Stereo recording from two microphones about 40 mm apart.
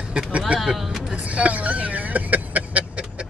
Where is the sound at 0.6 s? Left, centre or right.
Centre.